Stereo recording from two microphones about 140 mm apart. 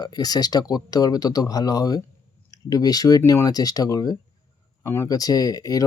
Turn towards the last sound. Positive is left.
turn(degrees=25)  # may be behind; listen again after turning